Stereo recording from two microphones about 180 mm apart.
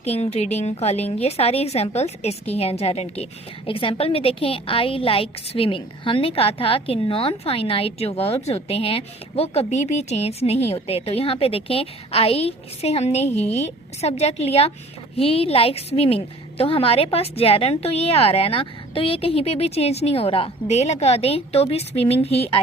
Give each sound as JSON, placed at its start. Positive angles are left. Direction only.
{"t": 0.0, "sound": "a woman's voice", "side_deg": 35}